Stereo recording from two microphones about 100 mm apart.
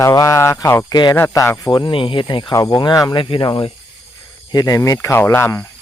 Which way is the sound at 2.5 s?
40° left (ahead or behind).